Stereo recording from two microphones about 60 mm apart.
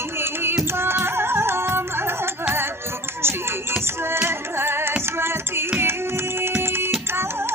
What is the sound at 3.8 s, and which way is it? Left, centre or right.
Music, right.